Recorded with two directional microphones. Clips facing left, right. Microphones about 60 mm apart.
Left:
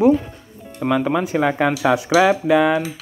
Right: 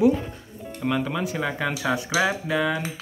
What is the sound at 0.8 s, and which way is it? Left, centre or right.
Speech, left.